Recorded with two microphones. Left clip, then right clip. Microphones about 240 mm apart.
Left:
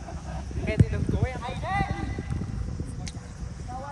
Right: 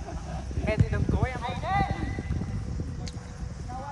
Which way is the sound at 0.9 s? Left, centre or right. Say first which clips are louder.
Right 1 dB; right.